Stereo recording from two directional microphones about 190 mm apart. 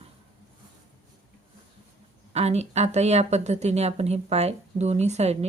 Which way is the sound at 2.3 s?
35° right (ahead or behind).